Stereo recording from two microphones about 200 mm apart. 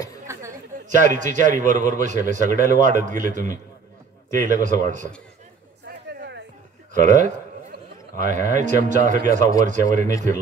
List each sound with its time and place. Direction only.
0.8 s a man's voice: 40° right (ahead or behind)
5.9 s a sound: 55° right (ahead or behind)
6.9 s a man's voice: 40° right (ahead or behind)